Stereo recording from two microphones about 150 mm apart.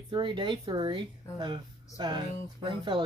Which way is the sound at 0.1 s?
30° right (ahead or behind).